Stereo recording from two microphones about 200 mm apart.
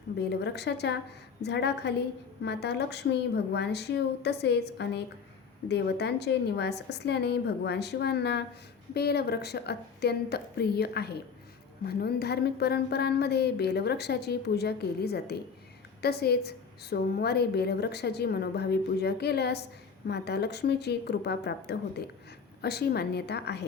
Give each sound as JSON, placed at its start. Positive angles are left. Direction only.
{"t": 0.2, "sound": "a woman's voice", "side_deg": 55}